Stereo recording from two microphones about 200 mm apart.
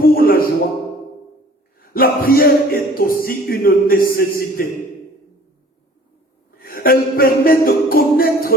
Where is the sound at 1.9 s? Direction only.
45° left (ahead or behind).